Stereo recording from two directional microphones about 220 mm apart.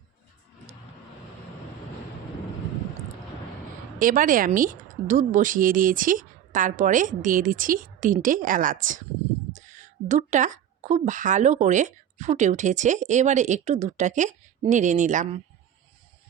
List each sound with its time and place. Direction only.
3.9 s a woman's voice: 40° right (ahead or behind)